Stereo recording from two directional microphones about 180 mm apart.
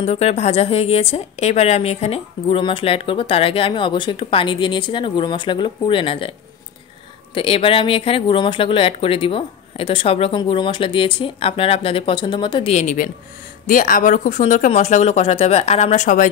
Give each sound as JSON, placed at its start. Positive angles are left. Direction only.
{"t": 0.0, "sound": "a woman's voice", "side_deg": 35}
{"t": 7.3, "sound": "speech", "side_deg": 30}
{"t": 12.7, "sound": "a woman's voice", "side_deg": 45}